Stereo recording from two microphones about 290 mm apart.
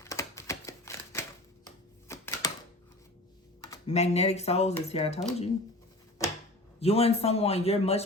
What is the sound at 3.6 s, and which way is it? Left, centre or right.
A man's voice, centre.